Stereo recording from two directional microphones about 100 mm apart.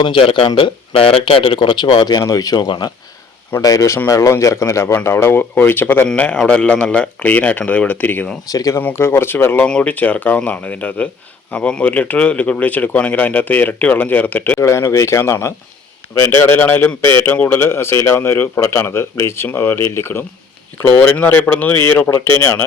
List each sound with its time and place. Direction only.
0.0 s a man's voice: 60° left (ahead or behind); by 8.4 s 15° left (ahead or behind)
8.5 s speech: 35° left (ahead or behind)
8.8 s a man's voice: 25° left (ahead or behind)
14.6 s a man's voice: 30° left (ahead or behind)